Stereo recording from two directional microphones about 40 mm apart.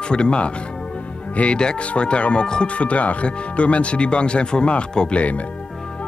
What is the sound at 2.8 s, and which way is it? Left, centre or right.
Speech, left.